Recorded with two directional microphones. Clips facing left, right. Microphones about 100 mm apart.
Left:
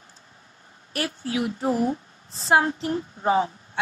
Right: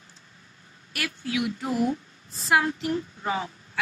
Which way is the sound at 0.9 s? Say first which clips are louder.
Left 2 dB; 35° left (ahead or behind).